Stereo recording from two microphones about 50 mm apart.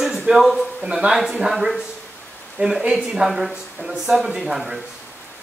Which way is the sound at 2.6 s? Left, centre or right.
Right.